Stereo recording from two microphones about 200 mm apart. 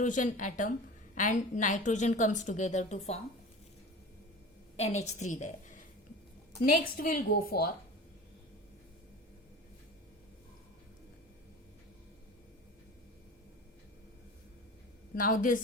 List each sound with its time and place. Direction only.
0.0 s a woman's voice: 40° left (ahead or behind)
4.8 s a woman's voice: 35° left (ahead or behind)
15.1 s a woman's voice: 45° left (ahead or behind)